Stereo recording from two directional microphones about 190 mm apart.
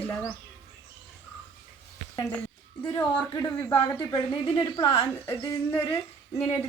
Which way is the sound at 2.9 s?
15° left (ahead or behind).